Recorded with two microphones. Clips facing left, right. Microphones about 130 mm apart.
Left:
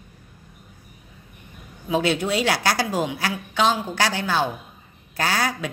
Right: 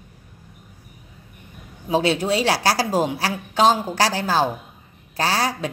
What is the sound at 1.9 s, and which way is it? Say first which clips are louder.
A woman's voice: right 2 dB; 35° right (ahead or behind).